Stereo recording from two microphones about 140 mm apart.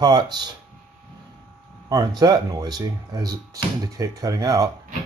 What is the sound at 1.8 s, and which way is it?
Speech, 30° right (ahead or behind).